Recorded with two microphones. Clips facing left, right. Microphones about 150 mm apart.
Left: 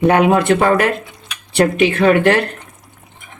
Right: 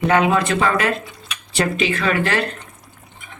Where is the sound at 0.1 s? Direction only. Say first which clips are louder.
Left 2 dB; 60° left (ahead or behind).